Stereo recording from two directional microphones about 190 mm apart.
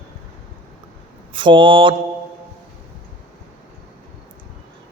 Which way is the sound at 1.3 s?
25° right (ahead or behind).